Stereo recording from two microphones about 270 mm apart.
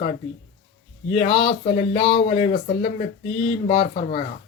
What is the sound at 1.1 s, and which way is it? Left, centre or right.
Speech, left.